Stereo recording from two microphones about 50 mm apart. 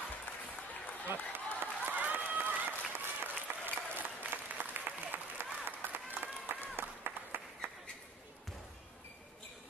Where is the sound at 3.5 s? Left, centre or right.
Right.